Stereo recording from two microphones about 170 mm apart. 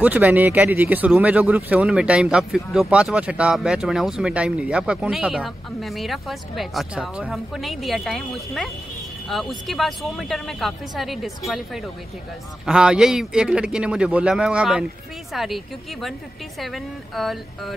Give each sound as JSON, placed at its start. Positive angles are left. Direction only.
{"t": 0.0, "sound": "speech", "side_deg": -10}